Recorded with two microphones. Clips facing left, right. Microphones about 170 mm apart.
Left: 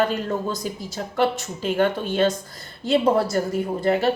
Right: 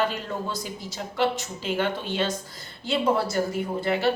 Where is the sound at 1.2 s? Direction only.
45° left (ahead or behind).